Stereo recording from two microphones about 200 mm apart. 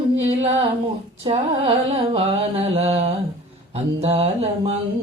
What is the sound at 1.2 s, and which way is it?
Female singing, 30° right (ahead or behind).